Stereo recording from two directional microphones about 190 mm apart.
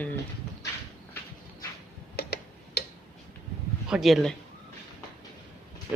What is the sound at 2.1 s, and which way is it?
Tick-tock, 60° left (ahead or behind).